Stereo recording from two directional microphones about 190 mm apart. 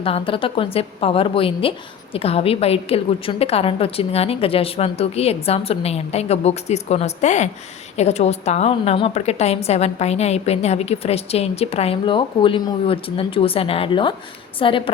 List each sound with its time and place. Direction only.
0.0 s a woman's voice: 30° left (ahead or behind)